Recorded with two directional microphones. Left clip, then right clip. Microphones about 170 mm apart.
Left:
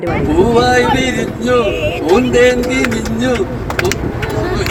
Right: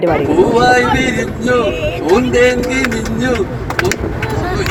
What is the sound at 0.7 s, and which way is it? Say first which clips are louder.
Speech: right 1 dB; 15° left (ahead or behind).